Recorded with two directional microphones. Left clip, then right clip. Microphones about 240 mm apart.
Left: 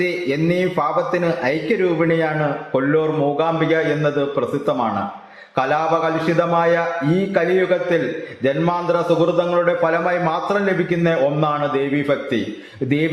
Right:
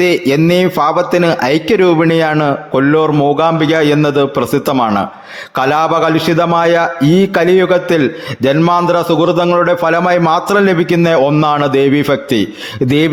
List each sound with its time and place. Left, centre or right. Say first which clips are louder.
0.0 s a man's voice: right 9 dB; right